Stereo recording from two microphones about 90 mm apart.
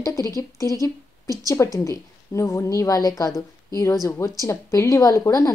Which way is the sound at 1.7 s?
35° left (ahead or behind).